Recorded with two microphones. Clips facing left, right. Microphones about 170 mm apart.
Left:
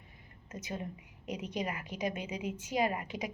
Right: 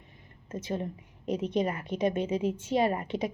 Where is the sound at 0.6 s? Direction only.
30° right (ahead or behind).